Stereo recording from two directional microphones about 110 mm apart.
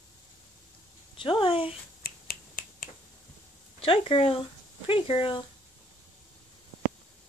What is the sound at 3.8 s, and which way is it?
Speech, 55° left (ahead or behind).